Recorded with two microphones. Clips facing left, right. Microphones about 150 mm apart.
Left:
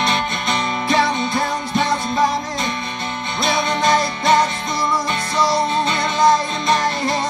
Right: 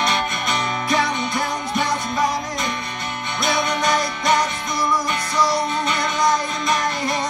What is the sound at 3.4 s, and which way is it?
Music, 25° left (ahead or behind).